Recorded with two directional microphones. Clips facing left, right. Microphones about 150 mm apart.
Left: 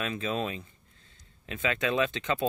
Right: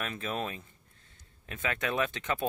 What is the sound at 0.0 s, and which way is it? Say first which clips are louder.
Speech: left 4 dB; 90° left.